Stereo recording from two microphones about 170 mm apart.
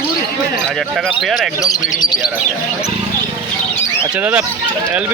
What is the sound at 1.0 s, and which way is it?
Speech, centre (ahead or behind).